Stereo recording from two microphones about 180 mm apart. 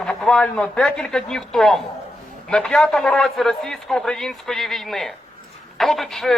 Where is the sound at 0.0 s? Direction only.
5° left (ahead or behind).